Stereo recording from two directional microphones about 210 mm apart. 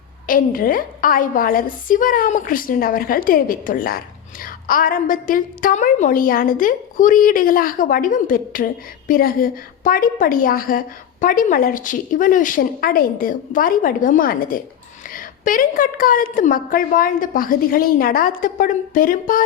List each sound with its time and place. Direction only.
0.3 s a woman's voice: 40° left (ahead or behind)